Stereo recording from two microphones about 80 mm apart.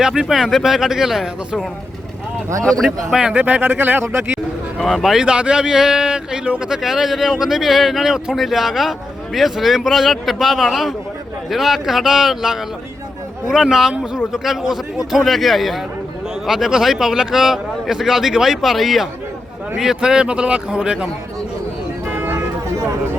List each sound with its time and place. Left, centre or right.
0.0 s speech: centre
2.6 s speech: centre
3.1 s speech: centre
4.8 s speech: centre
5.2 s speech: centre
22.0 s music: right